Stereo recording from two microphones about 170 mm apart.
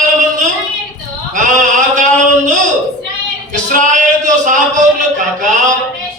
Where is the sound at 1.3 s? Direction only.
50° right (ahead or behind).